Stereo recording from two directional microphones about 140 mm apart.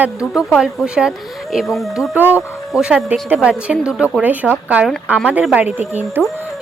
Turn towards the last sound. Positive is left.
turn(degrees=-15)  # may be behind; listen again after turning